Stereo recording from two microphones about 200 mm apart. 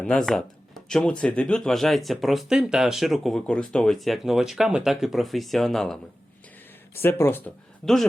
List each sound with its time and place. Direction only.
0.0 s speech: 5° left (ahead or behind)
6.9 s speech: 10° left (ahead or behind)